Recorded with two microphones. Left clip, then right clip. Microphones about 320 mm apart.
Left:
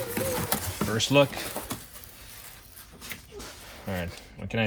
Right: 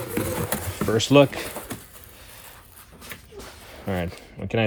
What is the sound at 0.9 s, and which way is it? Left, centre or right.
Speech, right.